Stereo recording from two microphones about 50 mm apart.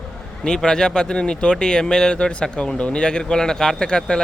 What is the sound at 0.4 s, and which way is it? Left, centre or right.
Speech, centre.